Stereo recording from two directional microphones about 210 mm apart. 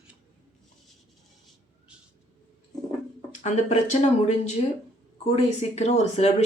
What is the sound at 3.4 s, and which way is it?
Speech, 35° left (ahead or behind).